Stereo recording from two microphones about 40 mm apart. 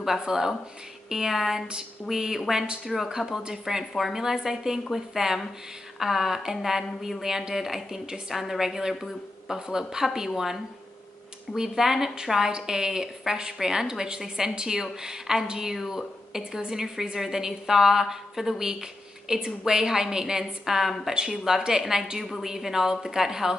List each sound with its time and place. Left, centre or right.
0.3 s a woman's voice: centre